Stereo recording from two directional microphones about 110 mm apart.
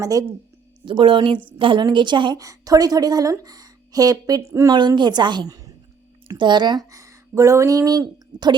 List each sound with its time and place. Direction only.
0.0 s speech: 35° right (ahead or behind)
0.9 s a woman's voice: 50° right (ahead or behind)
2.4 s speech: 35° right (ahead or behind)
4.7 s speech: 45° right (ahead or behind)
6.2 s speech: 45° right (ahead or behind)